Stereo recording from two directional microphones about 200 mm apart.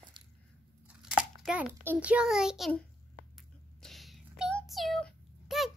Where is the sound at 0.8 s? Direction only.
5° right (ahead or behind).